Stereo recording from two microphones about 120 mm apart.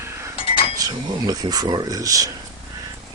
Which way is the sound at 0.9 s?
35° right (ahead or behind).